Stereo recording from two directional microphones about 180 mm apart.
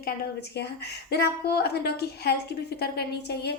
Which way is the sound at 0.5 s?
65° left (ahead or behind).